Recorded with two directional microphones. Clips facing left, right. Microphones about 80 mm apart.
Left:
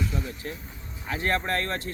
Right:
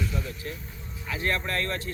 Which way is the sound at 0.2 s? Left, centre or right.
Left.